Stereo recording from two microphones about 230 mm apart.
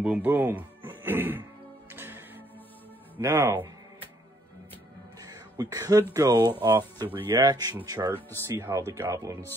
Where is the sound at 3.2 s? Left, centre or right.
Centre.